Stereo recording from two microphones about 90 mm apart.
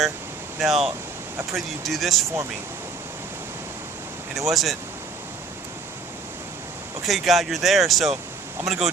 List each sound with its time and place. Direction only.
0.6 s speech: centre (ahead or behind)
4.4 s speech: centre (ahead or behind)
7.0 s speech: centre (ahead or behind)